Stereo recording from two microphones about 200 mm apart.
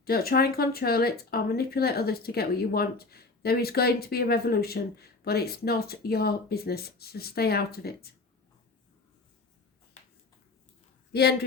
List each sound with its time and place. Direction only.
0.0 s speech: 50° left (ahead or behind)
11.1 s speech: 55° left (ahead or behind)